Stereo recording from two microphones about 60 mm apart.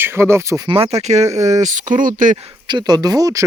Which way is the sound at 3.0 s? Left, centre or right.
Right.